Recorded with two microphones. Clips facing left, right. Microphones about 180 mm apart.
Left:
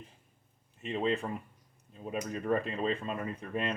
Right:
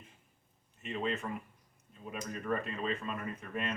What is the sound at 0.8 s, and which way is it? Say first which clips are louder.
Speech: left 5 dB; 35° left (ahead or behind).